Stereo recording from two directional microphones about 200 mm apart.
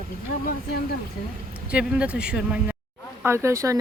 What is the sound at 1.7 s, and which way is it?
Speech, 5° right (ahead or behind).